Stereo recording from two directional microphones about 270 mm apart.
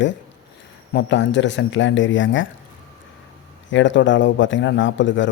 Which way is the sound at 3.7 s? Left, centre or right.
Left.